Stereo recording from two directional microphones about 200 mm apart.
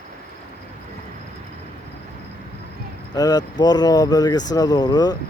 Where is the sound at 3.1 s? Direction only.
20° left (ahead or behind).